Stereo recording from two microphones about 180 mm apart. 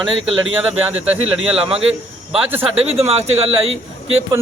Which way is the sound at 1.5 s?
35° right (ahead or behind).